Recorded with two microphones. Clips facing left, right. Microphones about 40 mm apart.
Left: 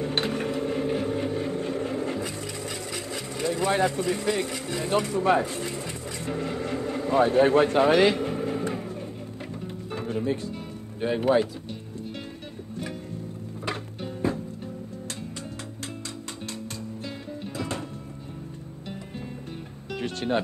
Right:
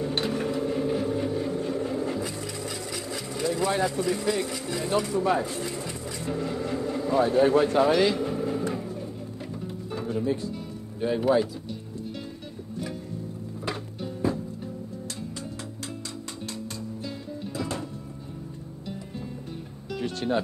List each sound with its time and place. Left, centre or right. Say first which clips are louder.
0.0 s vehicle: even; left
9.6 s music: even; left
11.0 s speech: left 1 dB; left
13.7 s music: left 1 dB; left
17.6 s music: even; left
19.9 s music: even; left